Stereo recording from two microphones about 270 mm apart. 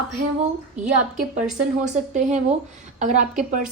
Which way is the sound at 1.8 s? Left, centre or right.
Right.